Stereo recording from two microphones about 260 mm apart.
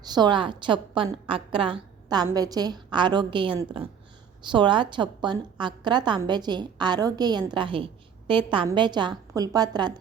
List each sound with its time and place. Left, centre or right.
0.0 s a woman's voice: centre